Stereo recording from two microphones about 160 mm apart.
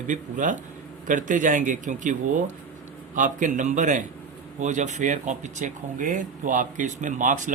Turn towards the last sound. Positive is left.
turn(degrees=-55)  # may be behind; listen again after turning